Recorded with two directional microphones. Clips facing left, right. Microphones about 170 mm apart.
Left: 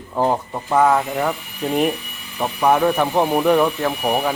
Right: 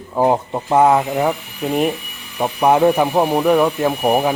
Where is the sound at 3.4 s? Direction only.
5° right (ahead or behind).